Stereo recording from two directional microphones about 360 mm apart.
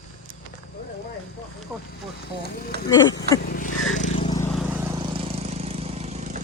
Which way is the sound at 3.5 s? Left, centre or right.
Left.